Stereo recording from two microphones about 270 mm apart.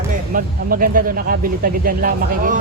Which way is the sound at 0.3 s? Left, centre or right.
Right.